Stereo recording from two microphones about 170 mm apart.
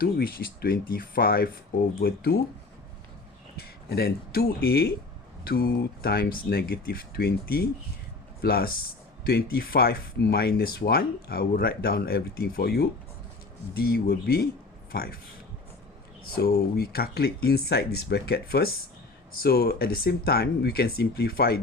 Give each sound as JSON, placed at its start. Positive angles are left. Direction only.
{"t": 0.0, "sound": "speech", "side_deg": 60}
{"t": 3.6, "sound": "speech", "side_deg": 65}
{"t": 16.2, "sound": "speech", "side_deg": 65}